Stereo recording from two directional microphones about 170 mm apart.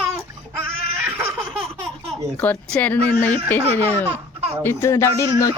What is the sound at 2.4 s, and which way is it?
A man's voice, 5° left (ahead or behind).